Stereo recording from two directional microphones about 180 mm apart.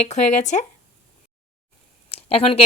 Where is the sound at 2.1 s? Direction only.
35° left (ahead or behind).